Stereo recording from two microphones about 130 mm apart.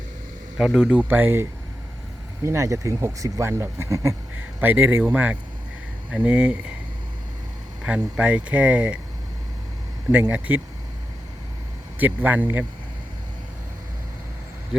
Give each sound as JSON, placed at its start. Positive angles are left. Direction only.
{"t": 0.5, "sound": "speech", "side_deg": 0}
{"t": 7.9, "sound": "speech", "side_deg": -10}
{"t": 10.1, "sound": "speech", "side_deg": -10}
{"t": 11.9, "sound": "speech", "side_deg": -15}